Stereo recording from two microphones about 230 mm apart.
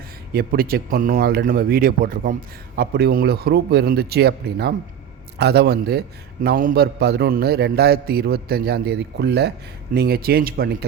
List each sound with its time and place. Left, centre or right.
0.3 s a man's voice: right